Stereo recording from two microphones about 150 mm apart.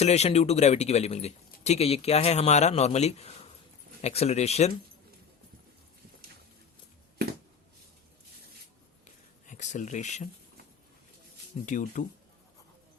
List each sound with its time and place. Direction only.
0.0 s speech: 45° left (ahead or behind)
9.5 s speech: 55° left (ahead or behind)
11.6 s speech: 55° left (ahead or behind)